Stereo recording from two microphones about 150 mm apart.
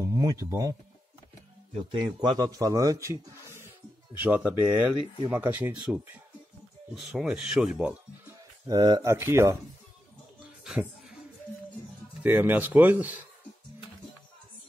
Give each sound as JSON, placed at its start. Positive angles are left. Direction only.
{"t": 0.0, "sound": "speech", "side_deg": -20}
{"t": 1.7, "sound": "speech", "side_deg": -40}
{"t": 2.1, "sound": "speech", "side_deg": -25}
{"t": 8.6, "sound": "speech", "side_deg": -30}
{"t": 10.6, "sound": "a sound", "side_deg": -5}
{"t": 12.2, "sound": "speech", "side_deg": -10}